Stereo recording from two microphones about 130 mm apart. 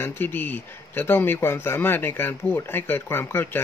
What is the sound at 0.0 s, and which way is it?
Speech, 15° left (ahead or behind).